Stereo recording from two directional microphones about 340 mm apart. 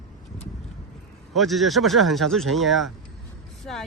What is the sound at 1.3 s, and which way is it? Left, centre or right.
Speech, centre.